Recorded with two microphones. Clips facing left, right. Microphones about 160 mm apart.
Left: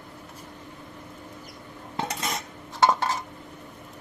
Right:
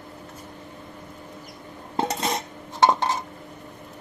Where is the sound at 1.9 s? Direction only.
25° right (ahead or behind).